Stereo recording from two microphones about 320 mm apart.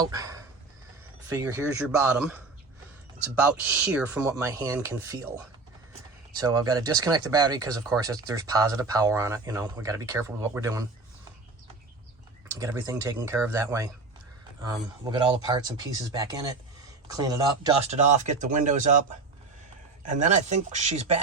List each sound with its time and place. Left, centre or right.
0.0 s speech: centre
2.1 s speech: centre
6.3 s speech: centre
12.5 s speech: centre
20.1 s speech: right